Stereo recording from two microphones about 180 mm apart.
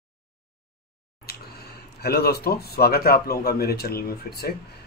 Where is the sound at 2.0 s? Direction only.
60° left (ahead or behind).